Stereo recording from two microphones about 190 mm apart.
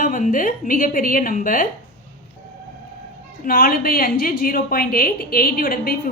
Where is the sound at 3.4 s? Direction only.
50° left (ahead or behind).